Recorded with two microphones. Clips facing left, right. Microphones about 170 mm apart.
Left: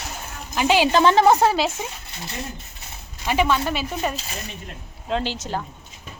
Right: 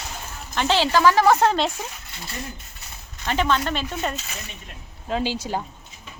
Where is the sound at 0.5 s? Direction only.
10° left (ahead or behind).